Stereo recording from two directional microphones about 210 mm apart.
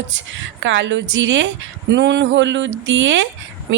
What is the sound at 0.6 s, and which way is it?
A woman's voice, 60° right (ahead or behind).